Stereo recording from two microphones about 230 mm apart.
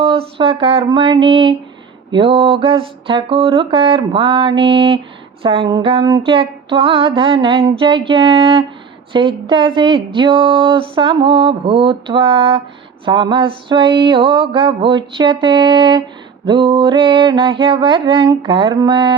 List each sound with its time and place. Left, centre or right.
0.0 s speech: right